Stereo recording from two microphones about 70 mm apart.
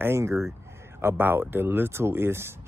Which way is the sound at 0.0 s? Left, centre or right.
Right.